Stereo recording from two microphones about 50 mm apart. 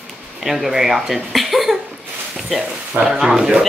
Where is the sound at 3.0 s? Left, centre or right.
Centre.